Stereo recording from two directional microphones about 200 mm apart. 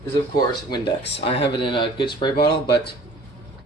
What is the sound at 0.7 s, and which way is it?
Speech, 25° left (ahead or behind).